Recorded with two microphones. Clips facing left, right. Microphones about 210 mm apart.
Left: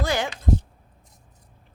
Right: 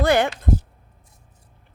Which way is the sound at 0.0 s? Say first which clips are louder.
Right 7 dB; 60° right (ahead or behind).